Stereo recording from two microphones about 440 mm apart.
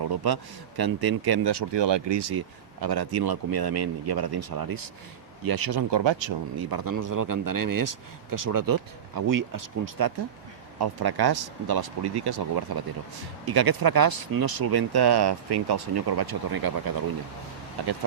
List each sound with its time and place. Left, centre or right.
0.2 s speech: right
6.6 s speech: right
10.8 s speech: right